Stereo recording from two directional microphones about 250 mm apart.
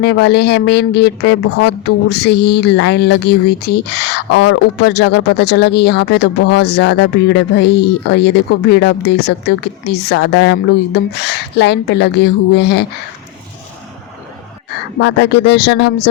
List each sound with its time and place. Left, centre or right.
0.0 s a woman's voice: left
14.7 s speech: left